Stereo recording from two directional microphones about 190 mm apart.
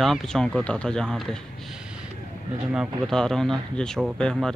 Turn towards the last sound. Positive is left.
turn(degrees=0)  # may be behind; listen again after turning